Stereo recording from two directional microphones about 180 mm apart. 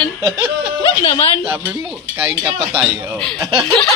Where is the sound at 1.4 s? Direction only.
10° right (ahead or behind).